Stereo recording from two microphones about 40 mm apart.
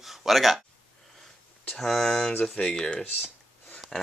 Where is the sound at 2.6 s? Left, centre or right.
Left.